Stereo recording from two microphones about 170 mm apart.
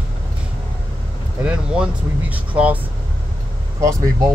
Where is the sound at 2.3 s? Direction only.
10° right (ahead or behind).